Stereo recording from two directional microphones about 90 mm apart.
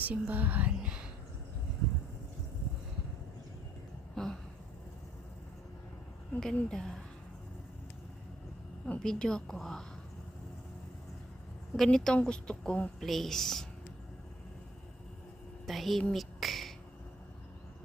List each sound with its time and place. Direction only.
0.0 s speech: 20° right (ahead or behind)
4.1 s a sound: 5° left (ahead or behind)
6.4 s a woman's voice: 5° left (ahead or behind)
8.9 s a woman's voice: 10° left (ahead or behind)
11.8 s a woman's voice: 5° left (ahead or behind)
15.6 s a woman's voice: centre (ahead or behind)
16.1 s a sound: centre (ahead or behind)